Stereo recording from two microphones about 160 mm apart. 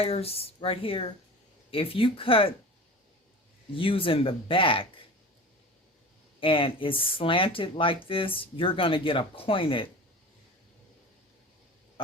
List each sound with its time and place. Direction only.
0.0 s speech: 40° left (ahead or behind)
3.8 s speech: 35° left (ahead or behind)
6.4 s speech: 35° left (ahead or behind)
12.0 s speech: 35° left (ahead or behind)